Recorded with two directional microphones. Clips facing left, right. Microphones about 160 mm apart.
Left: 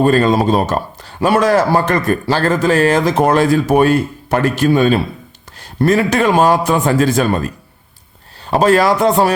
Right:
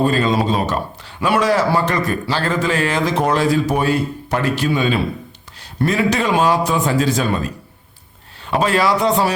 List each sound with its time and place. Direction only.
0.0 s a man's voice: 50° left (ahead or behind)
8.4 s a man's voice: 40° left (ahead or behind)